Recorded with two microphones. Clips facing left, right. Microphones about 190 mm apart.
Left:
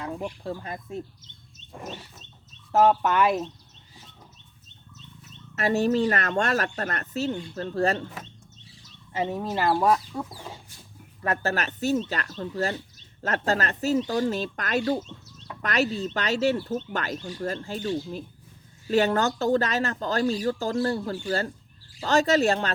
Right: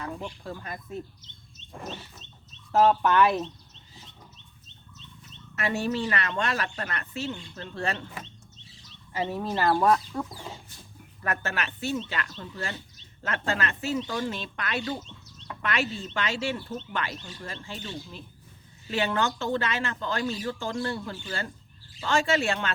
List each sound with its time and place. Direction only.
0.0 s speech: 30° left (ahead or behind)
5.5 s a woman's voice: 40° left (ahead or behind)
9.1 s speech: 15° left (ahead or behind)
11.2 s speech: 30° left (ahead or behind)
11.5 s a woman's voice: 40° left (ahead or behind)